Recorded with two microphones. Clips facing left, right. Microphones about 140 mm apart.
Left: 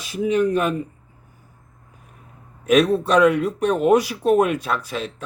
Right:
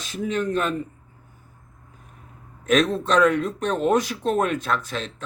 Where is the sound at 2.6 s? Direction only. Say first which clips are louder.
Left 4 dB; 10° left (ahead or behind).